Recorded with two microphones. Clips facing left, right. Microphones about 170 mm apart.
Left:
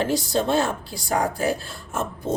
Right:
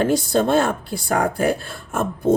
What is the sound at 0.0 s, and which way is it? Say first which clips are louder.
Speech: right 4 dB; 50° right (ahead or behind).